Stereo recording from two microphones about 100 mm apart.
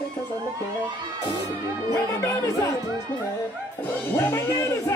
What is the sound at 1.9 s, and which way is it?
Speech, 30° left (ahead or behind).